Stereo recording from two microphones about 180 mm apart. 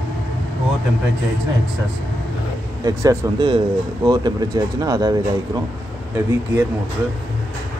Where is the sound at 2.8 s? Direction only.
20° right (ahead or behind).